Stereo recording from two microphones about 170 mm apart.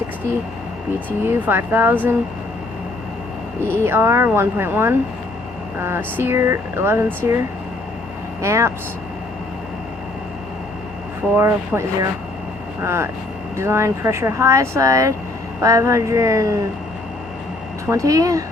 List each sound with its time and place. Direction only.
0.9 s speech: 10° right (ahead or behind)
3.8 s speech: 15° right (ahead or behind)
8.4 s speech: 15° right (ahead or behind)
11.3 s speech: 15° right (ahead or behind)
17.8 s speech: 20° right (ahead or behind)